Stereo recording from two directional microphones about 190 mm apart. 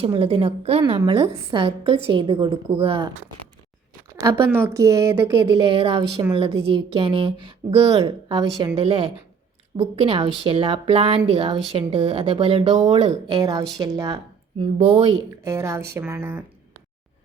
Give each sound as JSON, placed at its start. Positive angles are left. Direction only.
{"t": 0.0, "sound": "a woman's voice", "side_deg": -30}
{"t": 4.2, "sound": "a woman's voice", "side_deg": -20}
{"t": 5.5, "sound": "a woman's voice", "side_deg": -30}
{"t": 13.4, "sound": "a woman's voice", "side_deg": -20}
{"t": 14.6, "sound": "a woman's voice", "side_deg": -30}
{"t": 15.4, "sound": "speech", "side_deg": -15}